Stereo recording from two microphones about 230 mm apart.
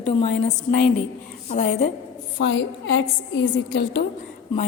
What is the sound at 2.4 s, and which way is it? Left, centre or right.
A woman's voice, left.